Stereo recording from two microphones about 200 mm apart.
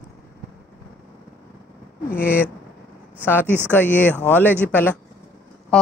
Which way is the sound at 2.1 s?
10° left (ahead or behind).